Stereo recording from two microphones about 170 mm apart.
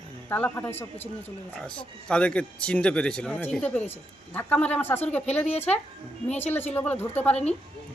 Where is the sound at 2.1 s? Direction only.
5° left (ahead or behind).